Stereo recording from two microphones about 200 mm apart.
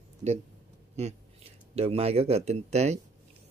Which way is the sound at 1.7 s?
30° right (ahead or behind).